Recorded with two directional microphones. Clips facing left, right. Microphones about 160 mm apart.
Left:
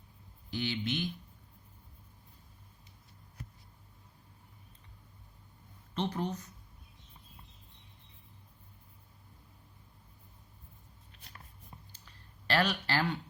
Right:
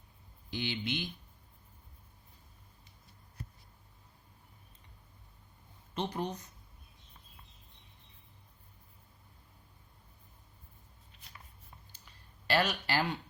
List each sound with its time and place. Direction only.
0.5 s speech: 15° right (ahead or behind)
5.9 s speech: 15° right (ahead or behind)
12.5 s speech: 10° right (ahead or behind)